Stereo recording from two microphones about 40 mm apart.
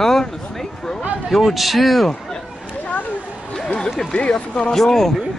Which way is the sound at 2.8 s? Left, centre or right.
Left.